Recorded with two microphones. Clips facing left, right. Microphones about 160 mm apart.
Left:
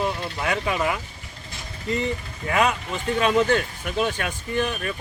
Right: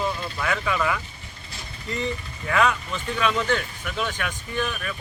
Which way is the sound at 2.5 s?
25° left (ahead or behind).